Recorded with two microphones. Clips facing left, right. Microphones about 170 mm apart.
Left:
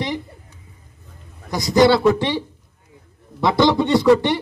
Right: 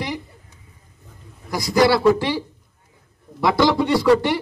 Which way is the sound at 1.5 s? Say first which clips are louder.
Left 2 dB; 20° left (ahead or behind).